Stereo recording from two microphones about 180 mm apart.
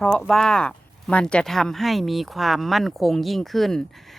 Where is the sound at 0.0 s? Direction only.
5° left (ahead or behind).